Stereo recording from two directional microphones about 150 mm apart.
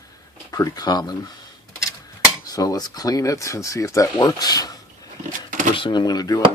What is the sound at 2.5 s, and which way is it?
Speech, 25° left (ahead or behind).